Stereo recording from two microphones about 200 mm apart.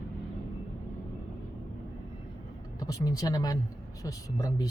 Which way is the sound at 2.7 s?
20° left (ahead or behind).